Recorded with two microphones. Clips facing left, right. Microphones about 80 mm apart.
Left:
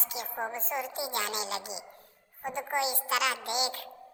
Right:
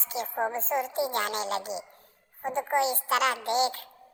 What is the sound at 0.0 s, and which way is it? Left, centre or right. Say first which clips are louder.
A woman's voice: right 6 dB; right.